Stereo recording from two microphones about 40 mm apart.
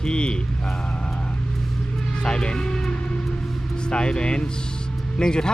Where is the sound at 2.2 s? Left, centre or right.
Left.